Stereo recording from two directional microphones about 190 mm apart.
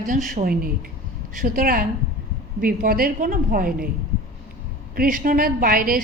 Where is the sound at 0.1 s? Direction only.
45° right (ahead or behind).